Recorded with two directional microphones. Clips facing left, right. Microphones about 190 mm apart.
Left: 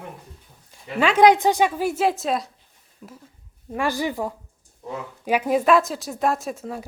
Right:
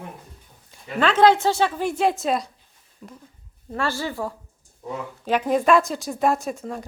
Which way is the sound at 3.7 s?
15° left (ahead or behind).